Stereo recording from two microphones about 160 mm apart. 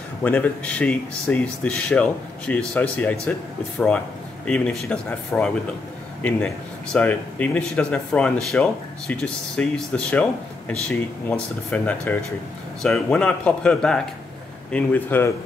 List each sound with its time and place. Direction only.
0.2 s speech: 10° left (ahead or behind)
4.5 s speech: 5° left (ahead or behind)